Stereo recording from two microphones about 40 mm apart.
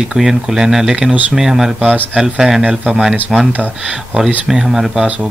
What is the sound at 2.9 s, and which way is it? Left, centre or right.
Speech, centre.